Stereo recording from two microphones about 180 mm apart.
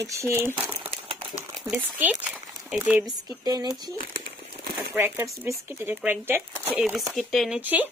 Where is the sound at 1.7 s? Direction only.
10° right (ahead or behind).